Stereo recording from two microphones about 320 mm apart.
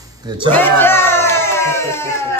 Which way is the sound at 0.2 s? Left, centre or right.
Centre.